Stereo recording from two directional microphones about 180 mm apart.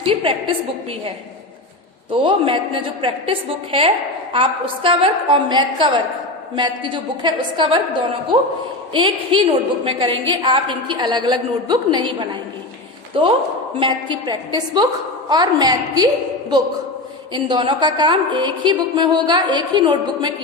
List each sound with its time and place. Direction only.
0.0 s a woman's voice: 30° right (ahead or behind)
13.2 s a woman's voice: 30° right (ahead or behind)
17.3 s a woman's voice: 25° right (ahead or behind)